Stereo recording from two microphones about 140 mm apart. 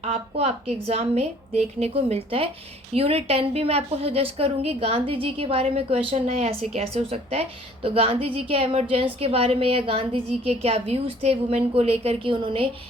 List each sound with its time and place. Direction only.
0.0 s a woman's voice: 50° right (ahead or behind)